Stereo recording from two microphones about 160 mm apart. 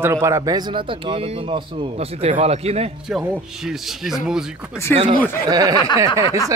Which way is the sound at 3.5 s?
5° right (ahead or behind).